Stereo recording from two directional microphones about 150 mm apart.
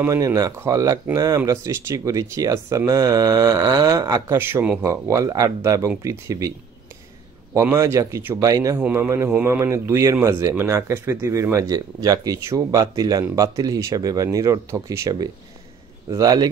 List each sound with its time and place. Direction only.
0.0 s speech: 20° right (ahead or behind)
7.5 s speech: 20° right (ahead or behind)